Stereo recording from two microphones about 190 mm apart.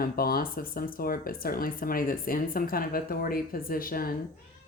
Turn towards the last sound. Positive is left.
turn(degrees=50)  # may be behind; listen again after turning